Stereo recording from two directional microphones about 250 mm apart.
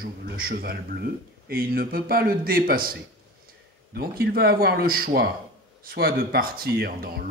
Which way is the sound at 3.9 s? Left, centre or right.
Right.